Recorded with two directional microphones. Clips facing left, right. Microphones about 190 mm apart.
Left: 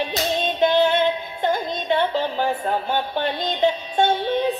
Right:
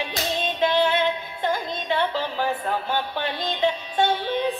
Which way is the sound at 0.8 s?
25° left (ahead or behind).